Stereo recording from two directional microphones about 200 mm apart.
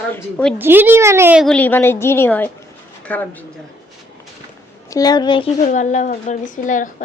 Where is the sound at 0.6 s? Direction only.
10° right (ahead or behind); by 3.2 s 5° left (ahead or behind).